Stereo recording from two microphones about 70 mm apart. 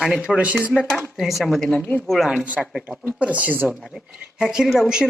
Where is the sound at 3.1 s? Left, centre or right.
Centre.